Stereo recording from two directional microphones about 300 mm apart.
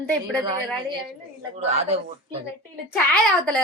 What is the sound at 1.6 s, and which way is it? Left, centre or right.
Speech, right.